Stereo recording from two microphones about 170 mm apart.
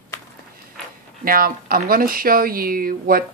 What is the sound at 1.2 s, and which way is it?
Speech, 60° right (ahead or behind).